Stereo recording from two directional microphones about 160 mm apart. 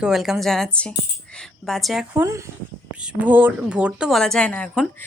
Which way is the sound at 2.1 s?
15° right (ahead or behind).